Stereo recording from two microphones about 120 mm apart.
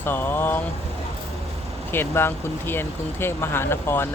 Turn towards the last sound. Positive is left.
turn(degrees=20)  # may be behind; listen again after turning